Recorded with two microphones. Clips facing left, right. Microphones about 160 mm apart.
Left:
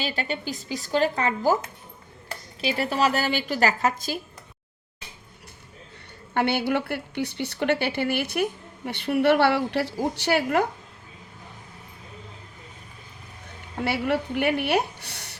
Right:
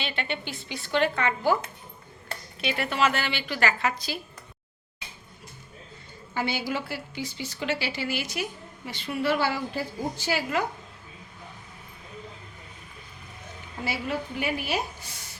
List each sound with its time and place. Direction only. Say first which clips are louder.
0.0 s a woman's voice: left 3 dB; 40° left (ahead or behind)
2.6 s a woman's voice: left 2 dB; 35° left (ahead or behind)
6.3 s a woman's voice: left 6 dB; 65° left (ahead or behind)
13.8 s a woman's voice: left 6 dB; 65° left (ahead or behind)